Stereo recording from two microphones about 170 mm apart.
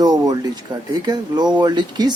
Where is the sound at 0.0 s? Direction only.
20° right (ahead or behind).